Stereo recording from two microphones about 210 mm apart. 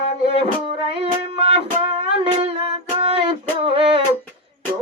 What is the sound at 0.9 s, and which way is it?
Music, 30° right (ahead or behind).